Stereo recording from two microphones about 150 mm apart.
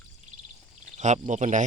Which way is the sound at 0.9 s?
55° right (ahead or behind).